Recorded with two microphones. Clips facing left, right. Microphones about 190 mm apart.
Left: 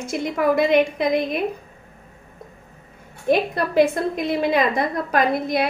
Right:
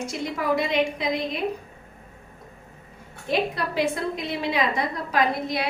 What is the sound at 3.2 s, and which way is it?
A woman's voice, 50° left (ahead or behind).